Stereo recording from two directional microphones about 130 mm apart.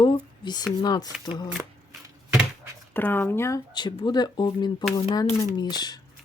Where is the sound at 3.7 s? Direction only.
35° left (ahead or behind).